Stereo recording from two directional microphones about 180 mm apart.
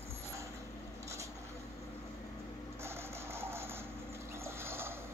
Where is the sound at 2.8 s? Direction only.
15° right (ahead or behind).